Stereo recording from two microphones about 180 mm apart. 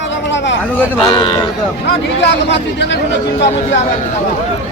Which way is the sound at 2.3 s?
80° left.